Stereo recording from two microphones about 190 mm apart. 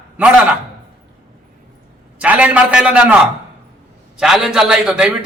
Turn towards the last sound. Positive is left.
turn(degrees=-5)  # may be behind; listen again after turning